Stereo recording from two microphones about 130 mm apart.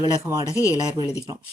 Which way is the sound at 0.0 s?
25° right (ahead or behind).